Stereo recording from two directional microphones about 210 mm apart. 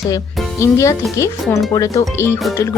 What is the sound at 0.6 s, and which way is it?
A woman's voice, 15° left (ahead or behind).